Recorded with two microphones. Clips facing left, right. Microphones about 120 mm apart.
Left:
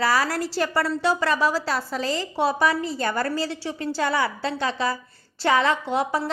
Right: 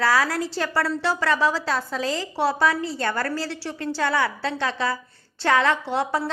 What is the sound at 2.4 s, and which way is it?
A woman's voice, 15° left (ahead or behind).